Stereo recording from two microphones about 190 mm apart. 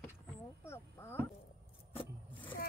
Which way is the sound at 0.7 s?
10° left (ahead or behind).